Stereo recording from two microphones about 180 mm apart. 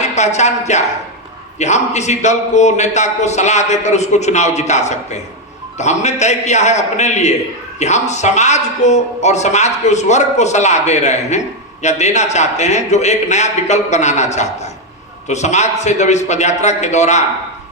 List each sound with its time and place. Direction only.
0.0 s a woman's voice: 40° left (ahead or behind)